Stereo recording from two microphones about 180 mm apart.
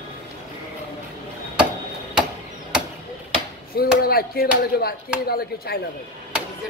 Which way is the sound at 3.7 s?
55° left (ahead or behind).